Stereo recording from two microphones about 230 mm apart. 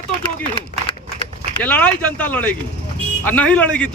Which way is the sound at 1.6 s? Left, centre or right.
Centre.